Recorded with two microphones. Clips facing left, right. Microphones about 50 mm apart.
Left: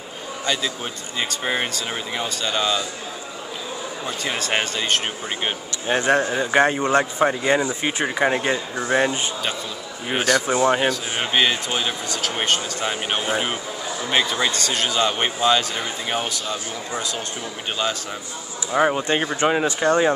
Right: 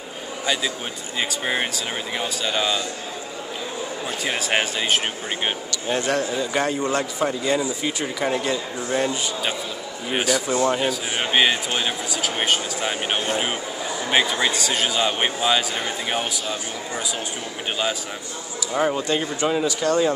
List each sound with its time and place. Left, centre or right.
1.3 s speech: centre
4.2 s speech: centre
5.9 s speech: left
10.1 s speech: centre
10.4 s speech: left
10.9 s a man's voice: centre
18.8 s speech: left